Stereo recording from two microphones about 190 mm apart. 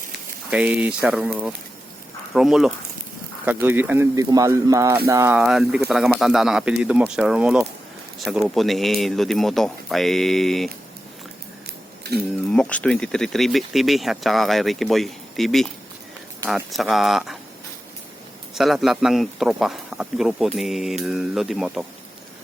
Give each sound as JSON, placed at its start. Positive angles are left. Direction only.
{"t": 0.5, "sound": "speech", "side_deg": -5}
{"t": 5.4, "sound": "speech", "side_deg": 0}
{"t": 12.5, "sound": "speech", "side_deg": 5}
{"t": 18.5, "sound": "speech", "side_deg": 0}